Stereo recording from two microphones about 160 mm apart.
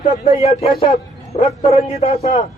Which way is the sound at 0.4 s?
40° left (ahead or behind).